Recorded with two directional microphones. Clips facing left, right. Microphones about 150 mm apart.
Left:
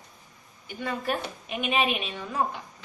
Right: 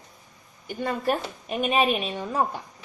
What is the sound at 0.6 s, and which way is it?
Speech, 40° right (ahead or behind).